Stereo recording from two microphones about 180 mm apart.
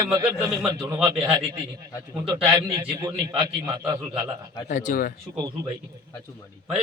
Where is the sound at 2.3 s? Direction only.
30° right (ahead or behind).